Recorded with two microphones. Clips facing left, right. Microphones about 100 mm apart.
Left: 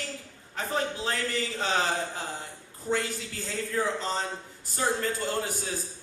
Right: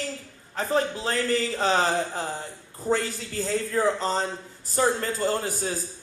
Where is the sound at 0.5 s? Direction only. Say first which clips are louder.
Right 5 dB; 40° right (ahead or behind).